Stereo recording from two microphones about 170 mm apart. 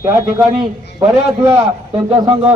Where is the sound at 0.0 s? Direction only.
20° right (ahead or behind).